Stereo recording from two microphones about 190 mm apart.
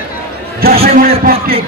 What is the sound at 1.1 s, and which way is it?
Music, 50° right (ahead or behind).